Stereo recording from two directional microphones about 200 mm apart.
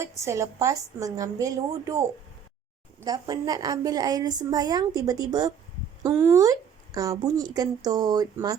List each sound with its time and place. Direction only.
0.0 s speech: 15° right (ahead or behind)
3.0 s a woman's voice: 20° right (ahead or behind)